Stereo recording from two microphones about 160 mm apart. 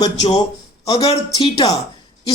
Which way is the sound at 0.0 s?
25° left (ahead or behind).